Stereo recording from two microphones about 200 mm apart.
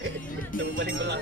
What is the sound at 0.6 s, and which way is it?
Music, 60° right (ahead or behind).